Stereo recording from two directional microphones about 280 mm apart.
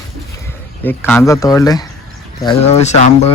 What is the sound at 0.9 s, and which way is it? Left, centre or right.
Speech, centre.